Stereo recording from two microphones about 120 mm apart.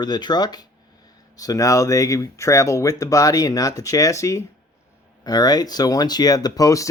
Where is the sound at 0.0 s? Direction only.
35° left (ahead or behind).